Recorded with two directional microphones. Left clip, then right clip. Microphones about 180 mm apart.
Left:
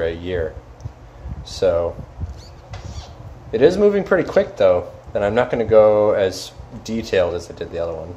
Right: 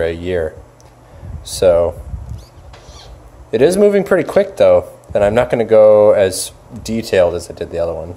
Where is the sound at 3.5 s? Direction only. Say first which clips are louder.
Right 3 dB; 45° right (ahead or behind).